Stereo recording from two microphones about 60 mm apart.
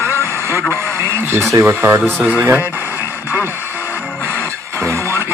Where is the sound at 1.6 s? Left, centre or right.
Right.